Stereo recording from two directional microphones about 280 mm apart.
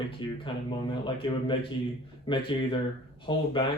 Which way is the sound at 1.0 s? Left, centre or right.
Centre.